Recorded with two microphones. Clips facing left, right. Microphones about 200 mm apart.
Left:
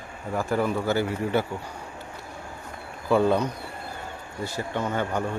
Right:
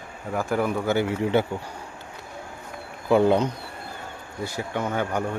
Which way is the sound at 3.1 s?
20° right (ahead or behind).